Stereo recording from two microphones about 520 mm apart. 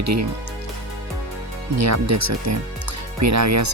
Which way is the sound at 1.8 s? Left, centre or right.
Right.